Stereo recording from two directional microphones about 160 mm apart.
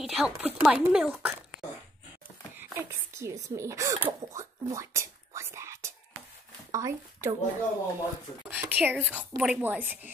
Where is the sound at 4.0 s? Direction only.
20° right (ahead or behind).